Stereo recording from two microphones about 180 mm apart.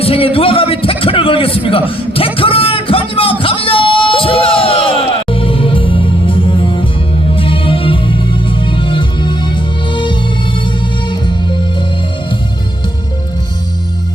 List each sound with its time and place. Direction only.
0.0 s a man's voice: 30° left (ahead or behind)
1.9 s a sound: 30° left (ahead or behind)
7.3 s music: 30° left (ahead or behind)